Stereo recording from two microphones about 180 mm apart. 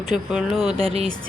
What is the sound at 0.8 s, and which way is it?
Speech, 35° right (ahead or behind).